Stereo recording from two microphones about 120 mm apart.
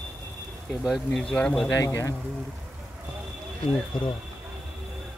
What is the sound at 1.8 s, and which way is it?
Speech, 25° left (ahead or behind).